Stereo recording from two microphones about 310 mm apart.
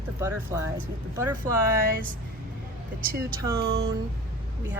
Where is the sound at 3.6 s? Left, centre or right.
Right.